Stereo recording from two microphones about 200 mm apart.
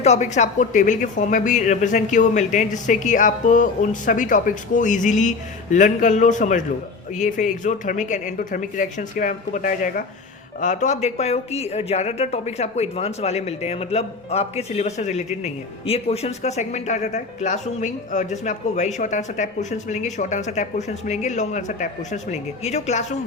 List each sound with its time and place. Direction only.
0.0 s speech: 35° left (ahead or behind)